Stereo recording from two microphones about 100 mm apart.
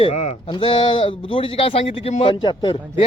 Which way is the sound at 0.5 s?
55° left (ahead or behind).